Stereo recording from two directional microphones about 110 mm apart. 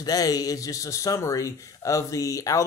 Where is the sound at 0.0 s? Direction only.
35° left (ahead or behind).